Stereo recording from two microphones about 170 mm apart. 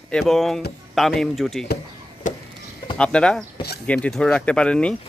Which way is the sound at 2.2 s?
45° left (ahead or behind).